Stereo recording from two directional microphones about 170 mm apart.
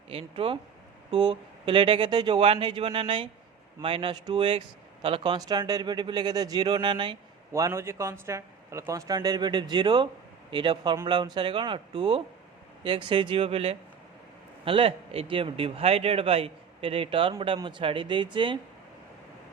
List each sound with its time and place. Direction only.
0.1 s speech: 35° right (ahead or behind)
7.5 s speech: 15° right (ahead or behind)